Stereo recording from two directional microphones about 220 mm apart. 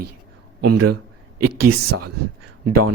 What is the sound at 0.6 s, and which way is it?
Speech, 90° right.